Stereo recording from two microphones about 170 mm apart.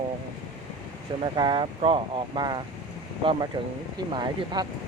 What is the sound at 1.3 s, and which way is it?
Speech, 30° right (ahead or behind).